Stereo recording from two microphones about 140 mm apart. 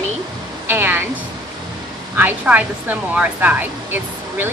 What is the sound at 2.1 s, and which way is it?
A woman's voice, 10° right (ahead or behind).